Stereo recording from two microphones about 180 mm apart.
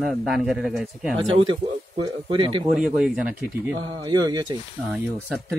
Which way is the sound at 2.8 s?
5° right (ahead or behind).